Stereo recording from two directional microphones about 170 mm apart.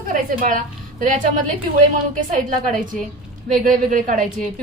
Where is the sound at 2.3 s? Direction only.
50° right (ahead or behind).